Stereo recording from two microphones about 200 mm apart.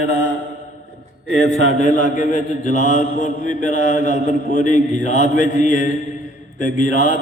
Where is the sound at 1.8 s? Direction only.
40° left (ahead or behind).